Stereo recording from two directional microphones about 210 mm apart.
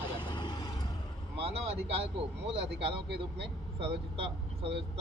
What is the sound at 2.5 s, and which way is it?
Speech, 25° right (ahead or behind).